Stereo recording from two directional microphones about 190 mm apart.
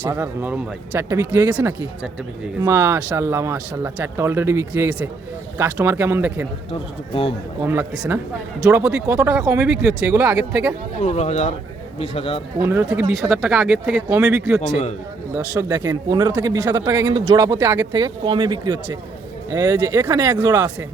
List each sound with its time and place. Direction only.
0.0 s speech: 10° right (ahead or behind)
6.7 s speech: 30° left (ahead or behind)
7.6 s speech: 10° right (ahead or behind)
11.0 s speech: 35° left (ahead or behind)
12.6 s speech: 10° right (ahead or behind)
13.3 s speech: centre (ahead or behind)
15.7 s speech: 20° right (ahead or behind)